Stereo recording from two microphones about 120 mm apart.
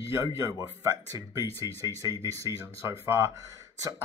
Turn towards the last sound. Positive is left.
turn(degrees=-30)  # may be behind; listen again after turning